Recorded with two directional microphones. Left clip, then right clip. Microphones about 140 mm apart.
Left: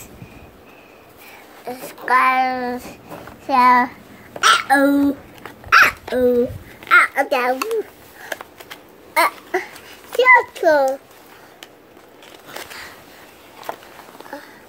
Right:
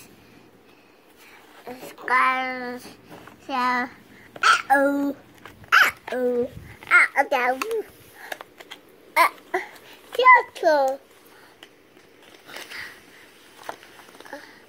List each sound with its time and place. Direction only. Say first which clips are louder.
1.7 s a child's voice: left 6 dB; 45° left (ahead or behind); by 3.9 s 25° left (ahead or behind)
4.4 s a child's voice: left 4 dB; 15° left (ahead or behind)
5.7 s dog: left 5 dB; 20° left (ahead or behind)
6.8 s babbling: left 4 dB; 20° left (ahead or behind)
7.5 s a child's voice: left 5 dB; 5° right (ahead or behind)
9.1 s crying: left 2 dB; 35° left (ahead or behind)
10.1 s a sound: left 3 dB; 25° left (ahead or behind)